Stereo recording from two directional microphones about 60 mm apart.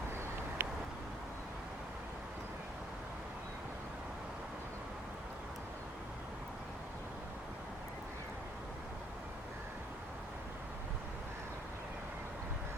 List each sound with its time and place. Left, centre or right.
0.6 s vehicle: right